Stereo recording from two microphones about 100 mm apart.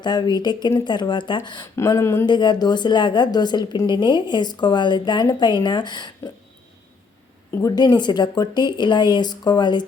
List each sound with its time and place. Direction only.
0.0 s a woman's voice: 45° left (ahead or behind)
2.0 s speech: 30° left (ahead or behind)
2.2 s a woman's voice: 50° left (ahead or behind)
7.8 s a woman's voice: 45° left (ahead or behind)